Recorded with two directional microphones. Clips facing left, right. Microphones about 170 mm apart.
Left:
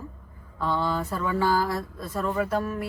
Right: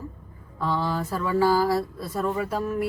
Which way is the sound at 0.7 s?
10° right (ahead or behind).